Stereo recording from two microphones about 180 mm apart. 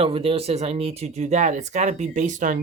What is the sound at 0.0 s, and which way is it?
Speech, 30° right (ahead or behind).